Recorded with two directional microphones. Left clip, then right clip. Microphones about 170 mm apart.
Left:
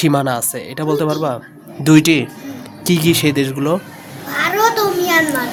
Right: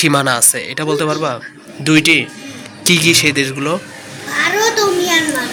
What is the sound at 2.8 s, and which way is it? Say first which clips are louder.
Speech: right 4 dB; 25° left (ahead or behind).